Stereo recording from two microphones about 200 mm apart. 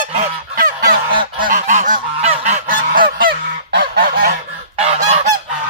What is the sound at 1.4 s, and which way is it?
Goose, 40° right (ahead or behind).